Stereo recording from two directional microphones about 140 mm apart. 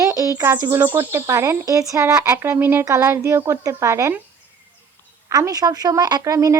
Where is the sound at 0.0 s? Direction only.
25° right (ahead or behind).